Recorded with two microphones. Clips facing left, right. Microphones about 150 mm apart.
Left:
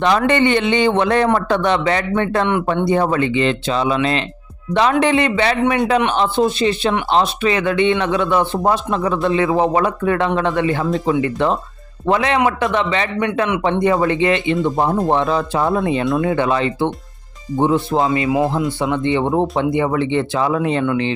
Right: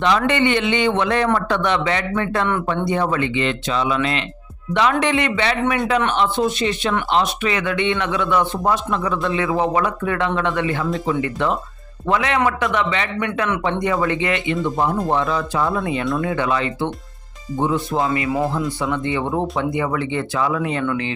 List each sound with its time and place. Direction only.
0.0 s speech: 45° left (ahead or behind); by 2.6 s 25° left (ahead or behind)
2.8 s speech: 35° left (ahead or behind)